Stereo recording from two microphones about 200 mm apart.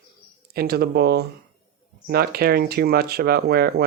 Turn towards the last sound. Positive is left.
turn(degrees=-55)  # may be behind; listen again after turning